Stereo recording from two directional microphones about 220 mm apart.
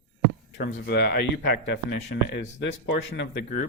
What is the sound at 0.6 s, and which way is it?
Speech, 45° left (ahead or behind).